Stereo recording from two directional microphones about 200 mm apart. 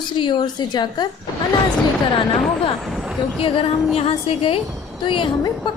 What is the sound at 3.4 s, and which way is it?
A woman's voice, 25° left (ahead or behind).